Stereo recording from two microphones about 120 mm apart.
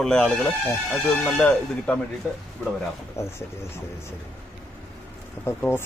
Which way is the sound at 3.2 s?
20° left (ahead or behind).